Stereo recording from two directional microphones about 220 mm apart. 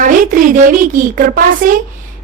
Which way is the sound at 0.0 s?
35° right (ahead or behind).